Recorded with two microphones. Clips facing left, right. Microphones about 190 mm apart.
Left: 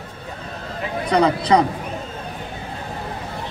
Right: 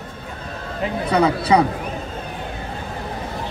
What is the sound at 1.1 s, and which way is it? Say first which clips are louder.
Speech: left 1 dB; 5° right (ahead or behind).